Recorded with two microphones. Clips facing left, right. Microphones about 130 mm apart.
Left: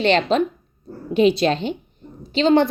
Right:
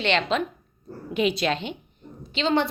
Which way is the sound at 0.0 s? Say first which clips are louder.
Left 6 dB; 40° left (ahead or behind).